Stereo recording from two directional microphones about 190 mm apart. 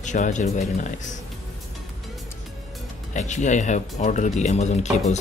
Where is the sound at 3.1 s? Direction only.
40° left (ahead or behind).